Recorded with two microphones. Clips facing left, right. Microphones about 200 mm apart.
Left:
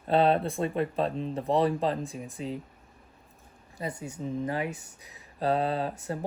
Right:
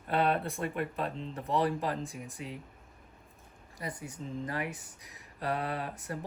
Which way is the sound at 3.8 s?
25° left (ahead or behind).